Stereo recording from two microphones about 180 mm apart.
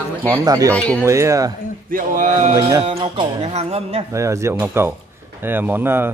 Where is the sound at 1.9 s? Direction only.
45° right (ahead or behind).